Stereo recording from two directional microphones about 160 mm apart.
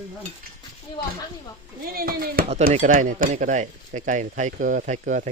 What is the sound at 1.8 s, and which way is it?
Speech, 70° right (ahead or behind).